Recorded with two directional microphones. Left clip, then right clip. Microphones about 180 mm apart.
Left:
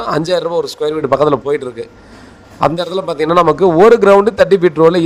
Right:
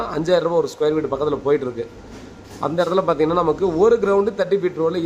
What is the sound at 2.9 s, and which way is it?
A man's voice, 35° left (ahead or behind).